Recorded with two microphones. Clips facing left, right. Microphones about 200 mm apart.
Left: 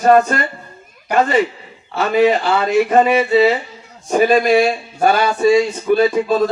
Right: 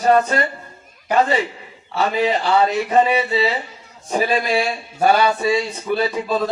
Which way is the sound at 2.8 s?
45° left (ahead or behind).